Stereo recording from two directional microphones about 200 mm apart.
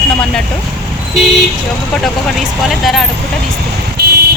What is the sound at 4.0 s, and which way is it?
Vehicle, 55° right (ahead or behind).